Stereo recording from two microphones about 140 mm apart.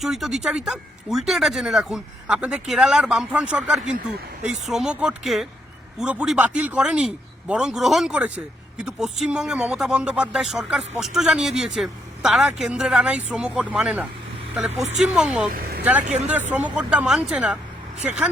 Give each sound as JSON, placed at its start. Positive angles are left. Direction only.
{"t": 0.0, "sound": "speech", "side_deg": 0}
{"t": 14.7, "sound": "speech", "side_deg": -55}
{"t": 15.0, "sound": "speech", "side_deg": -5}